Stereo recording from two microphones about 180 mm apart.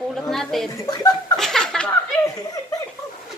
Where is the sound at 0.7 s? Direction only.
20° left (ahead or behind).